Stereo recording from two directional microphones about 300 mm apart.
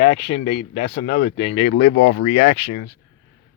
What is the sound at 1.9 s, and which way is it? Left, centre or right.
Speech, left.